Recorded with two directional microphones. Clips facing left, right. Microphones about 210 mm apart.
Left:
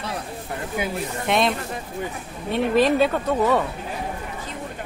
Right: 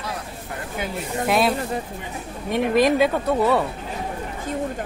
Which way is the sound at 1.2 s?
5° right (ahead or behind).